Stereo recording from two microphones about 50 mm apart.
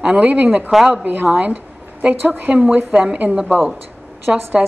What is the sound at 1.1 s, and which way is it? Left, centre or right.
A woman's voice, right.